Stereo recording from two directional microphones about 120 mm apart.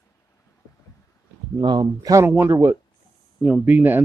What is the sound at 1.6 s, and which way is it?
Speech, 40° right (ahead or behind).